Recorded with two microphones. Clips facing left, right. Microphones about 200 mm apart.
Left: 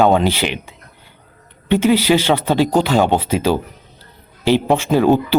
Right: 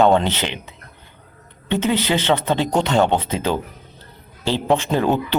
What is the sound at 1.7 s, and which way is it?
Speech, 10° left (ahead or behind).